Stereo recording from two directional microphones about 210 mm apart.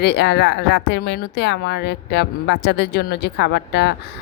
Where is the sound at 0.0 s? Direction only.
50° left (ahead or behind).